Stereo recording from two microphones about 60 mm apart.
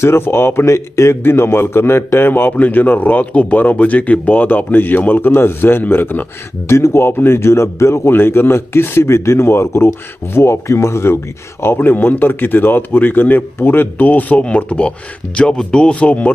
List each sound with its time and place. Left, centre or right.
0.0 s speech: left
1.2 s a man's voice: left
6.7 s speech: left
8.1 s speech: left
11.6 s a man's voice: left